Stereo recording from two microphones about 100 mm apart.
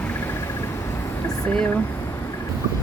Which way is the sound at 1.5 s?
15° left (ahead or behind).